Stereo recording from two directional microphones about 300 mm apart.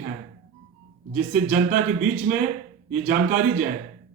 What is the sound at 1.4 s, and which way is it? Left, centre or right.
Speech, right.